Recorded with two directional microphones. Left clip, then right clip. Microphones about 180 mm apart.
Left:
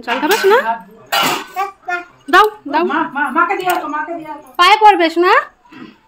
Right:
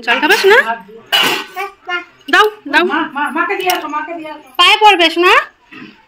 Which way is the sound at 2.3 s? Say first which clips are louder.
Right 1 dB; 10° left (ahead or behind).